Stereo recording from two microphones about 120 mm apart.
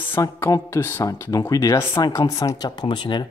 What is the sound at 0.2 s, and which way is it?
Speech, 25° left (ahead or behind).